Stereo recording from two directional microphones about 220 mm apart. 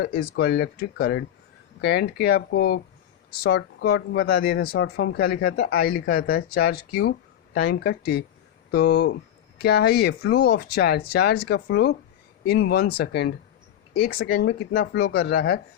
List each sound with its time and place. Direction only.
0.0 s speech: 45° left (ahead or behind)